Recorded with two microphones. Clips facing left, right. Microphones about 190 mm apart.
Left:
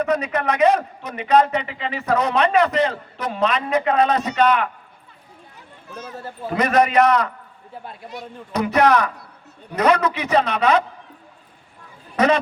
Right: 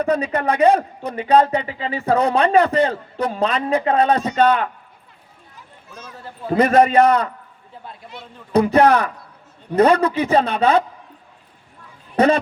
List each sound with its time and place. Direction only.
0.0 s a man's voice: 35° right (ahead or behind)
6.5 s a man's voice: 30° right (ahead or behind)
8.5 s a man's voice: 30° right (ahead or behind)
12.1 s a sound: 30° right (ahead or behind)